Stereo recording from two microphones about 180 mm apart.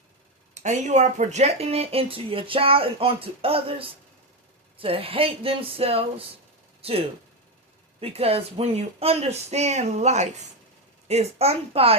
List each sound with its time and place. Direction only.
0.5 s speech: 40° right (ahead or behind)
8.0 s speech: 35° right (ahead or behind)